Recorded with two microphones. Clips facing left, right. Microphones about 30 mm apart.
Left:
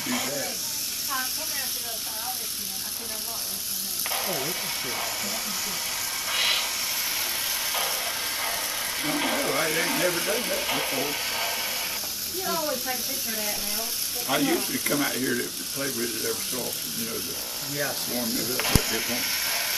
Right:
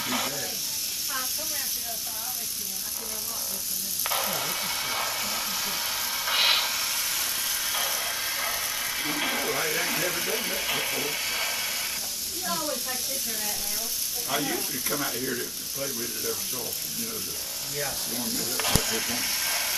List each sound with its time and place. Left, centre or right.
0.0 s speech: centre
4.0 s speech: centre
6.3 s vehicle: centre
9.7 s speech: centre
14.2 s speech: left
15.8 s speech: left
18.2 s speech: centre